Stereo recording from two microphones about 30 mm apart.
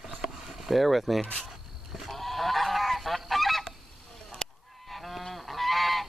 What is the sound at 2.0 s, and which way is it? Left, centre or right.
Goose, centre.